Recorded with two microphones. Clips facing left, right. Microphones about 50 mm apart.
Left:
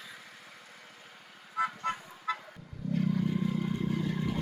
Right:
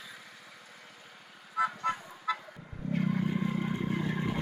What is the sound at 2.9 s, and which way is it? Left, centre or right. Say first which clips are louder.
Vehicle: even; right.